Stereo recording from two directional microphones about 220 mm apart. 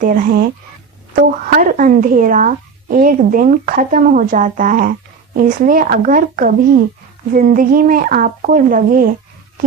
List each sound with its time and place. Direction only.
1.1 s speech: 40° right (ahead or behind)